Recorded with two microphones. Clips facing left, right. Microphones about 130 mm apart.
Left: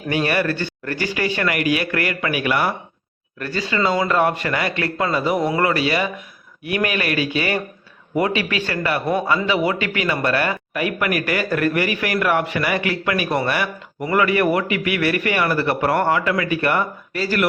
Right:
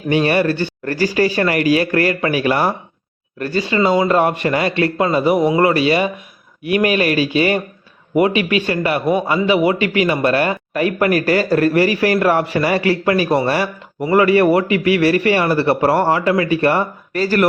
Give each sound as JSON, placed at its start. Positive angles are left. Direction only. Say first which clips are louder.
{"t": 0.1, "sound": "a man's voice", "louder": "right 5 dB", "side_deg": -25}
{"t": 0.9, "sound": "a man's voice", "louder": "right 7 dB", "side_deg": -40}
{"t": 17.1, "sound": "speech", "louder": "right 8 dB", "side_deg": -45}